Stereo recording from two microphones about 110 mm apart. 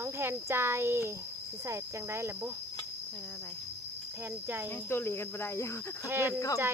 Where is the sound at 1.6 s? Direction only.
25° right (ahead or behind).